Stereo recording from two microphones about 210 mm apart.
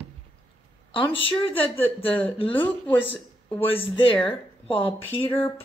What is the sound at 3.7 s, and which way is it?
Speech, 25° left (ahead or behind).